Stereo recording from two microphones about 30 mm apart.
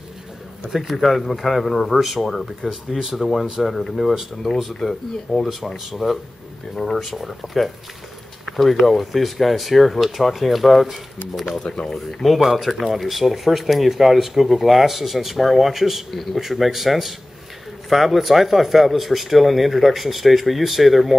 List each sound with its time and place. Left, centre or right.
0.7 s speech: centre
2.0 s speech: centre
3.2 s speech: centre
11.6 s speech: left
11.9 s speech: centre
12.4 s speech: centre